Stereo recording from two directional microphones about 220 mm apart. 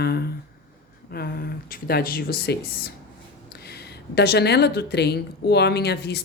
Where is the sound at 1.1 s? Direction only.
45° left (ahead or behind).